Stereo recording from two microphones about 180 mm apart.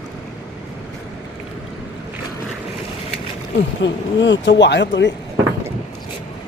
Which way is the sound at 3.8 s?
85° left.